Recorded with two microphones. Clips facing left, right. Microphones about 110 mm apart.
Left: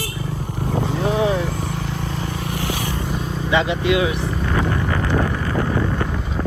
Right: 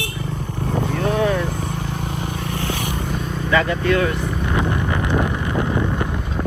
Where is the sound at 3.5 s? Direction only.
20° left (ahead or behind).